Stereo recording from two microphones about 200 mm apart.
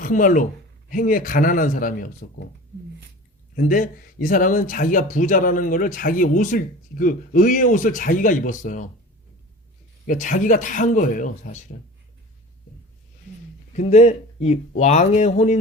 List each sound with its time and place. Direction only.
0.0 s a woman's voice: 40° left (ahead or behind)
3.5 s speech: 45° left (ahead or behind)
10.1 s speech: 40° left (ahead or behind)
13.7 s speech: 35° left (ahead or behind)